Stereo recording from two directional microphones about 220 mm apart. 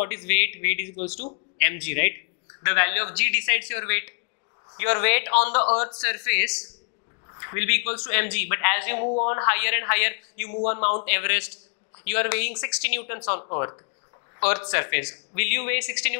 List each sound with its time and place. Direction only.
0.0 s speech: 15° left (ahead or behind)